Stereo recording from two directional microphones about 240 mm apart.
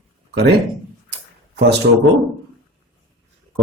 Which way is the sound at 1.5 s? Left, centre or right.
Right.